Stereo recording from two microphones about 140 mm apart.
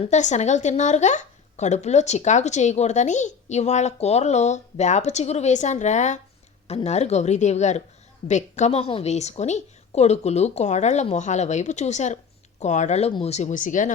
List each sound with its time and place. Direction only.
0.0 s speech: 60° left (ahead or behind)